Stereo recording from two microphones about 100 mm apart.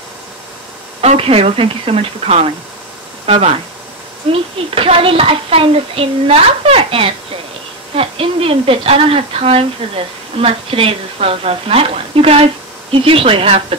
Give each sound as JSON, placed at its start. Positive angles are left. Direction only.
{"t": 1.0, "sound": "a woman's voice", "side_deg": -70}
{"t": 4.3, "sound": "a woman's voice", "side_deg": -70}